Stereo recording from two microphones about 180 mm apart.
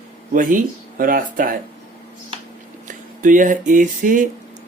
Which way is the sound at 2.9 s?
45° right (ahead or behind).